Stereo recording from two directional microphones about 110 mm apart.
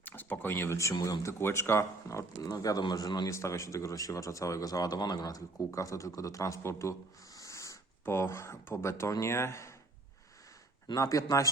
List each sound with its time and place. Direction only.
0.0 s a sound: 15° left (ahead or behind)
0.9 s speech: 40° left (ahead or behind)
1.2 s speech: 25° left (ahead or behind)
3.2 s speech: 25° left (ahead or behind)
7.3 s a sound: 30° left (ahead or behind)
9.2 s speech: 25° left (ahead or behind)
10.8 s speech: 30° left (ahead or behind)